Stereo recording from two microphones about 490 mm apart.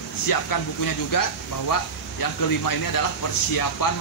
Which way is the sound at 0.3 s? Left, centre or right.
Left.